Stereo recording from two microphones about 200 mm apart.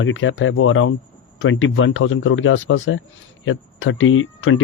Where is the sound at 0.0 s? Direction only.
75° left (ahead or behind).